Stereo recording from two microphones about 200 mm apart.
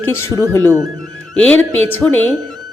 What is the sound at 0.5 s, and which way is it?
A woman's voice, 15° left (ahead or behind).